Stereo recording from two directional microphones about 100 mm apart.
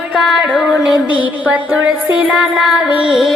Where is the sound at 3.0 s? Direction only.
5° right (ahead or behind).